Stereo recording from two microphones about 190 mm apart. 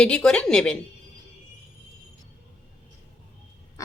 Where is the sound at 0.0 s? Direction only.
5° left (ahead or behind).